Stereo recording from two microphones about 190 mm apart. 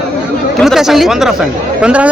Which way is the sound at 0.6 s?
Centre (ahead or behind).